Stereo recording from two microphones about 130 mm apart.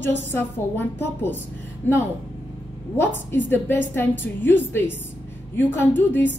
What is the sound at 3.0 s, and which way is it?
A woman's voice, 15° left (ahead or behind).